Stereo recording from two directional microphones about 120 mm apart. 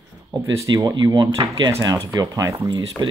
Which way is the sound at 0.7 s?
35° right (ahead or behind).